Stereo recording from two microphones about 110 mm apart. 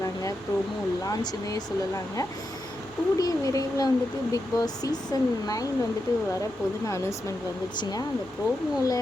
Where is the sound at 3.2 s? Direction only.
30° left (ahead or behind).